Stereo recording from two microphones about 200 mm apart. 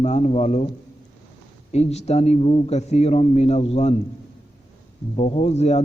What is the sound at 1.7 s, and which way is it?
A man's voice, 35° left (ahead or behind).